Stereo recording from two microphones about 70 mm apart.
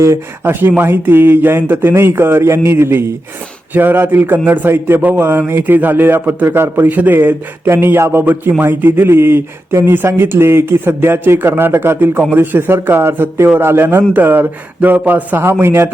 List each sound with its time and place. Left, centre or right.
0.8 s a man's voice: right